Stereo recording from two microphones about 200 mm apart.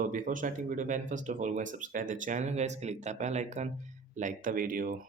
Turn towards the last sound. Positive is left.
turn(degrees=-45)  # may be behind; listen again after turning